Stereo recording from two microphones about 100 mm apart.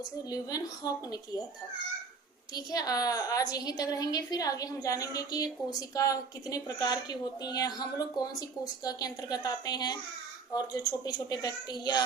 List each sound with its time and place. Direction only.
0.3 s a woman's voice: 40° left (ahead or behind)
2.6 s a woman's voice: 40° left (ahead or behind)